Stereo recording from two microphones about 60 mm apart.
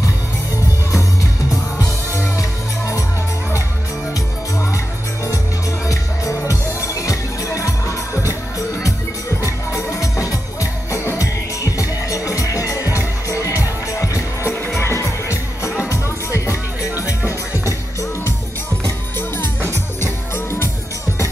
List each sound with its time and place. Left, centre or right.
5.9 s music: left
9.4 s music: left
19.1 s music: left